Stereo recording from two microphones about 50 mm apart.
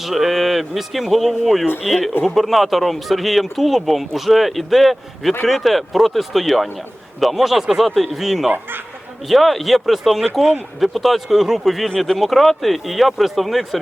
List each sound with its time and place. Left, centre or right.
0.0 s speech: centre
8.4 s speech: right
9.3 s speech: centre